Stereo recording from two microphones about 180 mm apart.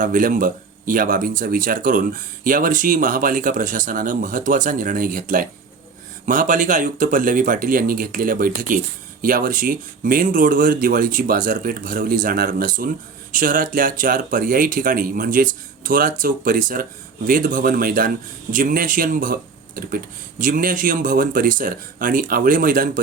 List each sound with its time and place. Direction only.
0.0 s speech: 50° right (ahead or behind)